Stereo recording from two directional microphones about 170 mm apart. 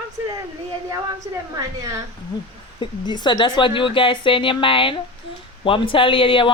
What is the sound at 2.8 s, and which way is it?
A woman's voice, 25° left (ahead or behind).